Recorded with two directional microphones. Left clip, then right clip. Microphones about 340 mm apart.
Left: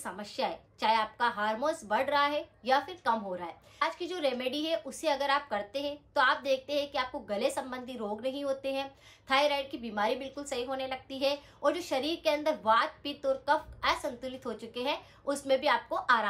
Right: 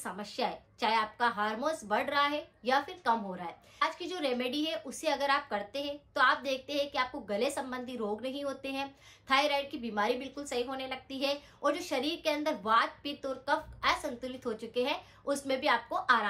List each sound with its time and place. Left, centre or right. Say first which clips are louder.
0.0 s a woman's voice: left 1 dB; centre